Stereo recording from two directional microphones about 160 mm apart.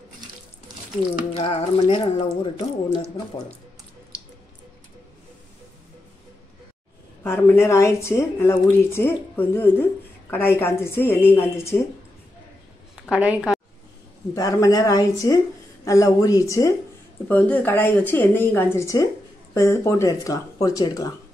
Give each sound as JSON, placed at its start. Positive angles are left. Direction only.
{"t": 1.3, "sound": "speech", "side_deg": 40}
{"t": 7.2, "sound": "a woman's voice", "side_deg": 15}
{"t": 13.1, "sound": "a woman's voice", "side_deg": -5}
{"t": 14.3, "sound": "a woman's voice", "side_deg": 20}